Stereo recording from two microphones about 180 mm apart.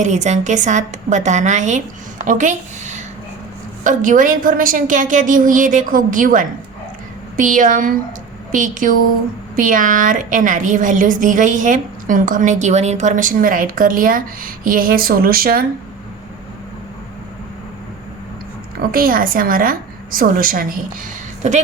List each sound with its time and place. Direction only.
0.0 s a woman's voice: 40° right (ahead or behind); by 15.6 s 55° right (ahead or behind)
18.9 s a woman's voice: 55° right (ahead or behind)
21.4 s a woman's voice: 40° right (ahead or behind)